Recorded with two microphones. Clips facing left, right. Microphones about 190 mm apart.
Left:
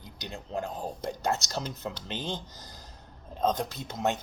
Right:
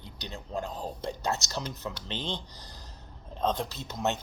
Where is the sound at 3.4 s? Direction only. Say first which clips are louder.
Left 2 dB; 45° left (ahead or behind).